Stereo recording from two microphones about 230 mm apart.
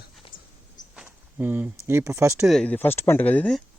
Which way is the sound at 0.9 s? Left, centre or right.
Centre.